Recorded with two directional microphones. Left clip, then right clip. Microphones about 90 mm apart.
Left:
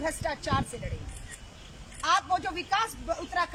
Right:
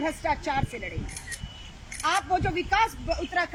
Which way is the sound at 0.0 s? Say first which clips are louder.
Right 4 dB; 20° left (ahead or behind).